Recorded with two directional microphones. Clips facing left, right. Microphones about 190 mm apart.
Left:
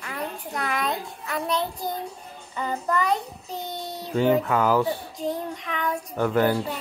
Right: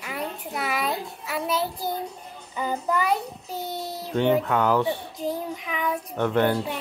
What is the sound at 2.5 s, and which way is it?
A child's voice, 5° right (ahead or behind).